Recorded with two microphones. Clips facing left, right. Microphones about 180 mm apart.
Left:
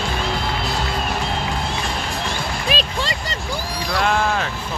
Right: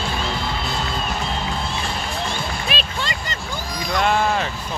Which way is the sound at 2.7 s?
35° left (ahead or behind).